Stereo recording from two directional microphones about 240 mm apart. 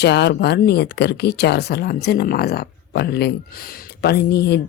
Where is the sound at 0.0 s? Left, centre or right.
Left.